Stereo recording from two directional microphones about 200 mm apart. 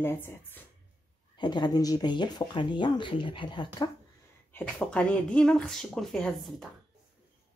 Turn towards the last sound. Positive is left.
turn(degrees=0)  # may be behind; listen again after turning